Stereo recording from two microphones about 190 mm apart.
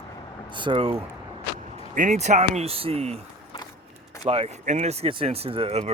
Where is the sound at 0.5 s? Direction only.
25° right (ahead or behind).